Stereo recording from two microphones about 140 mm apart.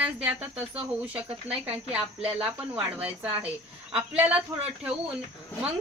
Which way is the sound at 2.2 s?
40° right (ahead or behind).